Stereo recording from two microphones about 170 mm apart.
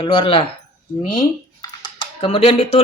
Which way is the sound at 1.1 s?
25° left (ahead or behind).